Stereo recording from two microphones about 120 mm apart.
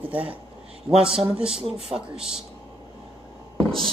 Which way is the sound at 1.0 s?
5° right (ahead or behind).